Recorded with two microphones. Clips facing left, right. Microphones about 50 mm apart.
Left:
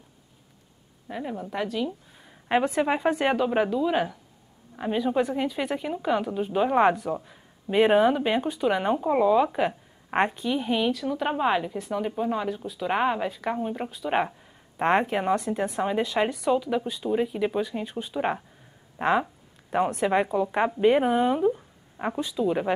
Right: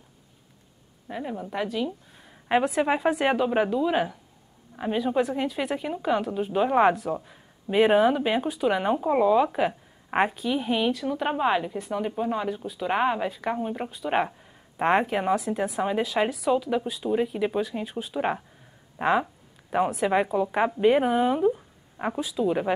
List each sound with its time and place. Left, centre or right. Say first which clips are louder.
1.0 s a woman's voice: even; centre